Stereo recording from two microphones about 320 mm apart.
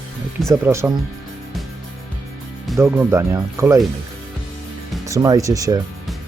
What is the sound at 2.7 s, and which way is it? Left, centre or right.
Speech, centre.